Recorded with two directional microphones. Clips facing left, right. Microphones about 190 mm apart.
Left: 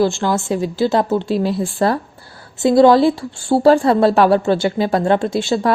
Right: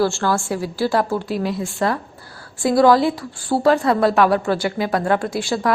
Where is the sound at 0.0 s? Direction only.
15° left (ahead or behind).